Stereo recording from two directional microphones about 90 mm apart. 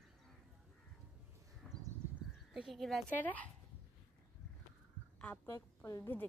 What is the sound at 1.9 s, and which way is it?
Crow, 40° right (ahead or behind).